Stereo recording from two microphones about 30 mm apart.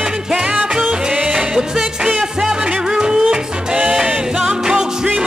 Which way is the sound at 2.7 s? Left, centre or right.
Right.